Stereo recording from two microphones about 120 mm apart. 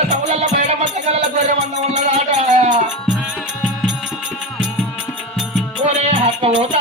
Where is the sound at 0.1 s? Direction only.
80° right.